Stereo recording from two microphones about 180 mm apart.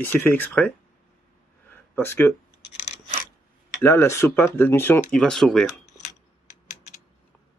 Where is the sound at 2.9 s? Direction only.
45° left (ahead or behind).